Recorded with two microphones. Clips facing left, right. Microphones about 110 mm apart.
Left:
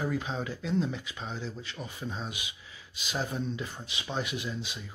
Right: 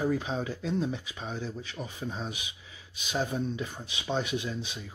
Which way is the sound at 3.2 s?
20° right (ahead or behind).